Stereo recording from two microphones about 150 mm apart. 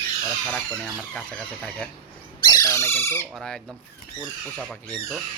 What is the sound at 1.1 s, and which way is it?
Speech, 5° left (ahead or behind).